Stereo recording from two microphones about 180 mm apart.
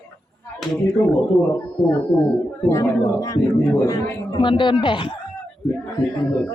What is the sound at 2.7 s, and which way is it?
A man's voice, 20° left (ahead or behind).